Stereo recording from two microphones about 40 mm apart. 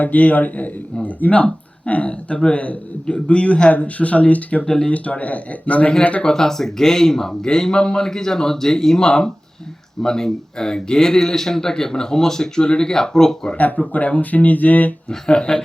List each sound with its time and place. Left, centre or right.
0.0 s speech: left
4.6 s a man's voice: centre
4.9 s speech: left
6.2 s a man's voice: centre
13.9 s speech: left
15.3 s a man's voice: left